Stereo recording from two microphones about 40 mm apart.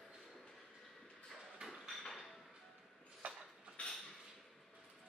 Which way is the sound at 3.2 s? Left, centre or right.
Right.